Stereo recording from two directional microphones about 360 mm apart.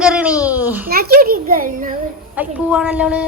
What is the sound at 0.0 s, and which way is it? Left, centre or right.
Babbling, centre.